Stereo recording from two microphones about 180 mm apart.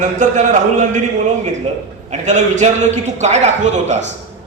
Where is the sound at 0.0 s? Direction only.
40° right (ahead or behind).